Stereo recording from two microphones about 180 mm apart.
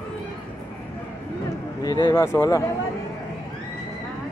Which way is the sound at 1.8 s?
30° left (ahead or behind).